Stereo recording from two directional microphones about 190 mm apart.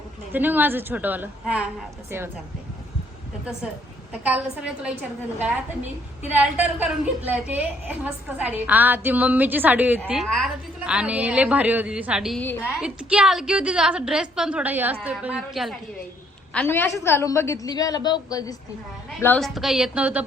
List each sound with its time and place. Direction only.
0.3 s a woman's voice: 10° right (ahead or behind)
4.1 s a woman's voice: 5° right (ahead or behind)
16.5 s a woman's voice: 10° left (ahead or behind)
19.5 s a woman's voice: centre (ahead or behind)